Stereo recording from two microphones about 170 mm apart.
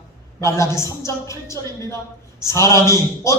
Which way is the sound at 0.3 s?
15° left (ahead or behind).